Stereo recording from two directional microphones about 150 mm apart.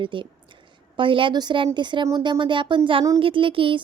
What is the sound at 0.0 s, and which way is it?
A woman's voice, 35° right (ahead or behind).